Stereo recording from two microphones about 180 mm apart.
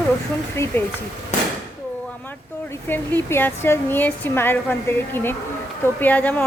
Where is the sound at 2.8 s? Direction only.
10° left (ahead or behind).